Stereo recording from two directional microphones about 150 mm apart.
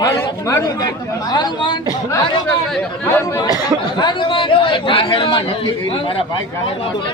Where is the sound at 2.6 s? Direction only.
5° left (ahead or behind).